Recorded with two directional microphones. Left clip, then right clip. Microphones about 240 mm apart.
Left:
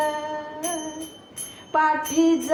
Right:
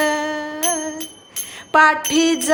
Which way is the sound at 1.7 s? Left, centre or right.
Right.